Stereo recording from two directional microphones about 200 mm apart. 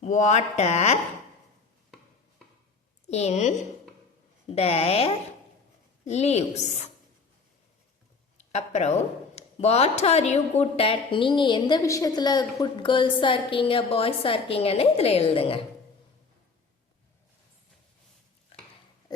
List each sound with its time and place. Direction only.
0.0 s speech: 35° left (ahead or behind)
3.1 s speech: 35° left (ahead or behind)
8.4 s speech: 35° left (ahead or behind)